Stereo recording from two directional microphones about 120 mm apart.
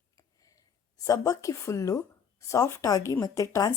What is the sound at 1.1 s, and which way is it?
A woman's voice, 30° left (ahead or behind).